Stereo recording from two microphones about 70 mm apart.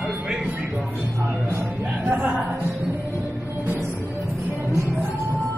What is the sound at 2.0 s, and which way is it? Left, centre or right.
Music, right.